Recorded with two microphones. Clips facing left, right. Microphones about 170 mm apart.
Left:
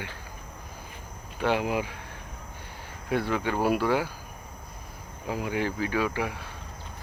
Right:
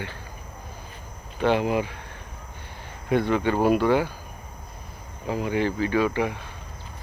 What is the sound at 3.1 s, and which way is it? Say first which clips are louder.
Speech: right 5 dB; 5° left (ahead or behind).